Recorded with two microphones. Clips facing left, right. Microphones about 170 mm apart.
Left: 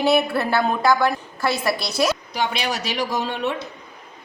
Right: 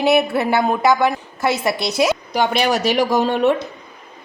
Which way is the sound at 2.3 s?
45° right (ahead or behind).